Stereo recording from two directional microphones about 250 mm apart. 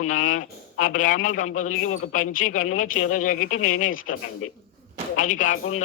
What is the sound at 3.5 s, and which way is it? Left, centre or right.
Speech, left.